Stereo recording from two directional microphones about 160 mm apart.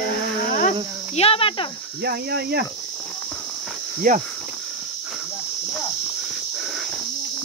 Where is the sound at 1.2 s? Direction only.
35° left (ahead or behind).